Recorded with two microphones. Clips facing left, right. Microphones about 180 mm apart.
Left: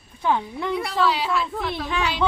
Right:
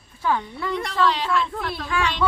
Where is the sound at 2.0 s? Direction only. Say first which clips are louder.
Right 1 dB; 10° left (ahead or behind).